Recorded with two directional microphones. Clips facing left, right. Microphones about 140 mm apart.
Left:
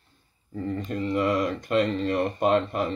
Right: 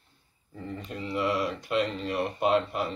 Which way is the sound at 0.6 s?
45° left (ahead or behind).